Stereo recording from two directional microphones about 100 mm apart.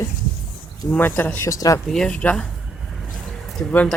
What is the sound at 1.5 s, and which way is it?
Speech, 35° left (ahead or behind).